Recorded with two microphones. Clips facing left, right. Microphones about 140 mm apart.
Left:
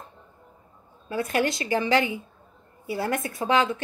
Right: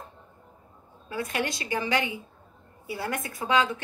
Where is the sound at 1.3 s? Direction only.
30° left (ahead or behind).